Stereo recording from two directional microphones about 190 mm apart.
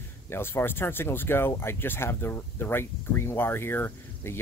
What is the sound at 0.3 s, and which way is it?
Speech, 10° left (ahead or behind).